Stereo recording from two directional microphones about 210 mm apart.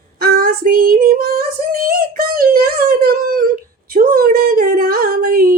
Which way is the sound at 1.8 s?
45° right (ahead or behind).